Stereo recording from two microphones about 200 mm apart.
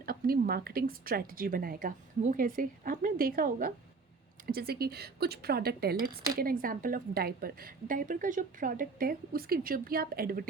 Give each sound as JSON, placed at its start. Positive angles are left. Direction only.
{"t": 0.0, "sound": "a woman's voice", "side_deg": -50}